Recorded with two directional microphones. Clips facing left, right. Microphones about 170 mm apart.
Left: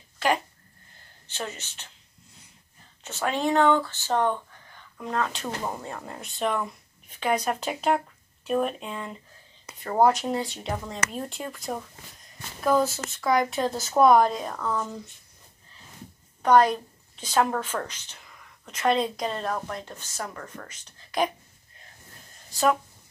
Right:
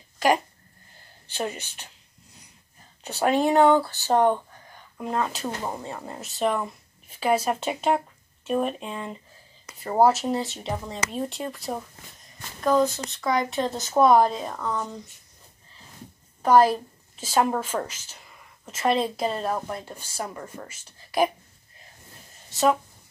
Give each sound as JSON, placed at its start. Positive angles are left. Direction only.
{"t": 1.2, "sound": "speech", "side_deg": -10}
{"t": 3.0, "sound": "a sound", "side_deg": -35}
{"t": 3.3, "sound": "speech", "side_deg": -10}
{"t": 3.6, "sound": "a sound", "side_deg": -40}
{"t": 3.9, "sound": "speech", "side_deg": -15}
{"t": 16.4, "sound": "speech", "side_deg": -5}